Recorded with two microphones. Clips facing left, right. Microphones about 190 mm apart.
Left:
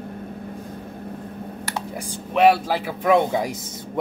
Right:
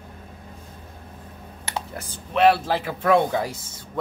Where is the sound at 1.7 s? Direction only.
10° left (ahead or behind).